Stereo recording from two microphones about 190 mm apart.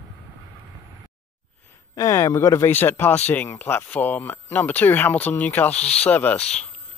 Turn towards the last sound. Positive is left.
turn(degrees=10)  # may be behind; listen again after turning